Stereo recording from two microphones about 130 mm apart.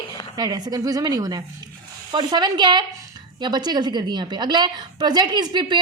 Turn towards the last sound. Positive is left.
turn(degrees=-35)  # may be behind; listen again after turning